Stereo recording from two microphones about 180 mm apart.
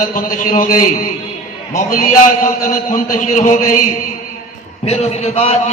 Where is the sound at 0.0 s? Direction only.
45° left (ahead or behind).